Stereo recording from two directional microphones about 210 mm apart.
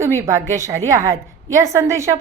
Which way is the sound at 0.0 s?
15° right (ahead or behind).